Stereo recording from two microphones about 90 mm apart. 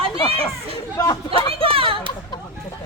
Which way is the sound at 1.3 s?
90° right.